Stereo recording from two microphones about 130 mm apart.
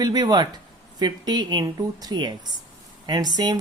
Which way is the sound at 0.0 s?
30° right (ahead or behind).